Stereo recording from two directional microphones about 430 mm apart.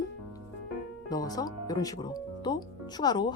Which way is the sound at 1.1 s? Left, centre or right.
Centre.